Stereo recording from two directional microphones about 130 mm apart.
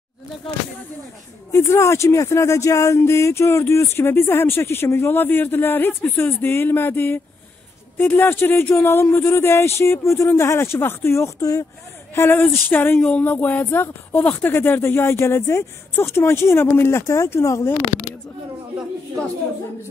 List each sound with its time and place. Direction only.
1.5 s speech: 20° left (ahead or behind)